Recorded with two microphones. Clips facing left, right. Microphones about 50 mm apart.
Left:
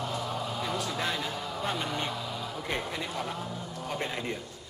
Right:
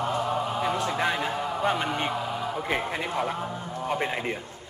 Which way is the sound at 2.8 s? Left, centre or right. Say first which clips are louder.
Right 6 dB; right.